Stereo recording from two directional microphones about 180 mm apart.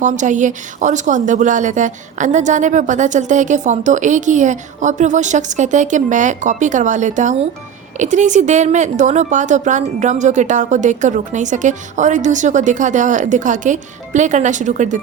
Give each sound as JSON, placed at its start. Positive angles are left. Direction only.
{"t": 0.0, "sound": "speech", "side_deg": -45}